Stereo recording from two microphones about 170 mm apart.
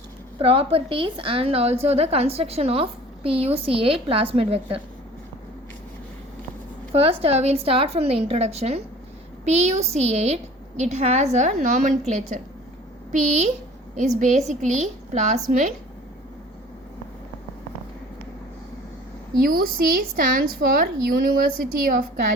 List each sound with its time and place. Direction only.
0.3 s a woman's voice: 35° right (ahead or behind)
6.9 s a woman's voice: 35° right (ahead or behind)
19.4 s a woman's voice: 60° right (ahead or behind)